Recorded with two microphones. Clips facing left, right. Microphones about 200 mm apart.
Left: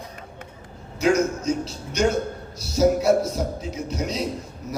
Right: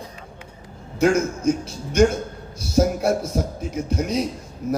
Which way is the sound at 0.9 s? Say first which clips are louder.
Right 1 dB; 55° right (ahead or behind).